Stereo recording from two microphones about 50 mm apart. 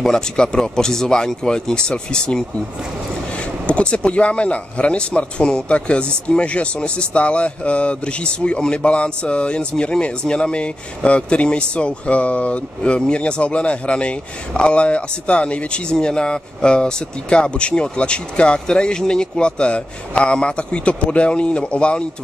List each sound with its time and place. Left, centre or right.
0.0 s speech: centre
3.6 s speech: left